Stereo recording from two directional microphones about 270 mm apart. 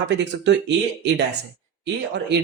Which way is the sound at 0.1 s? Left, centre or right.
Right.